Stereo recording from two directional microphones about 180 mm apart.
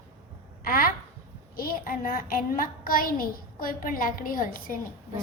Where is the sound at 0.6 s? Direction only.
55° left (ahead or behind).